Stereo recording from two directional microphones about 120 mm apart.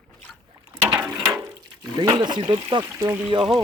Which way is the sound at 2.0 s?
40° right (ahead or behind).